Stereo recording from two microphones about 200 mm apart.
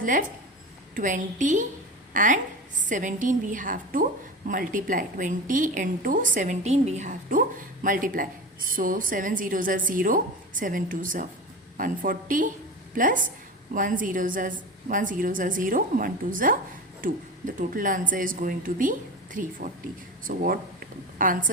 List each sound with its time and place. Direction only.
0.0 s a woman's voice: 40° right (ahead or behind)